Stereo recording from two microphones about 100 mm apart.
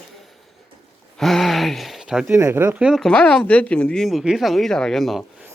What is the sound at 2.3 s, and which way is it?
Speech, 25° right (ahead or behind).